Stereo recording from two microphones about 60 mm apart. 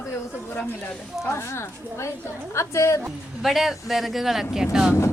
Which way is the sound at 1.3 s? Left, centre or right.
Left.